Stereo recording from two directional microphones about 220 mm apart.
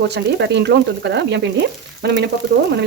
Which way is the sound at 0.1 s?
50° right (ahead or behind).